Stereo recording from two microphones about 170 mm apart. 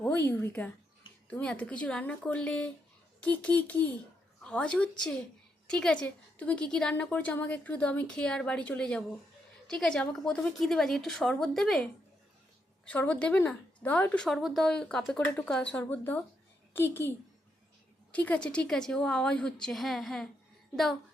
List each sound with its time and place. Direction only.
0.0 s a woman's voice: 10° left (ahead or behind)